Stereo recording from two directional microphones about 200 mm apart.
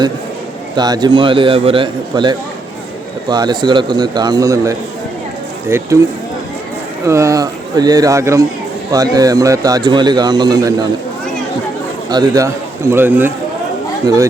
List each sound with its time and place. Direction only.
0.8 s a man's voice: 20° right (ahead or behind)
7.1 s a man's voice: 15° right (ahead or behind)
12.1 s speech: 20° right (ahead or behind)